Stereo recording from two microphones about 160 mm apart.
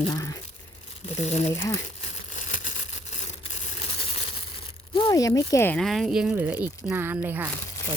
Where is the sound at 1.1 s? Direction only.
45° left (ahead or behind).